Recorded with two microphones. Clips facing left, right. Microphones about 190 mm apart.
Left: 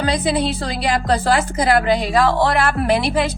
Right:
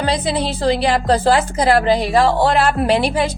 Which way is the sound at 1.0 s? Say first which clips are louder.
Right 1 dB; 30° right (ahead or behind).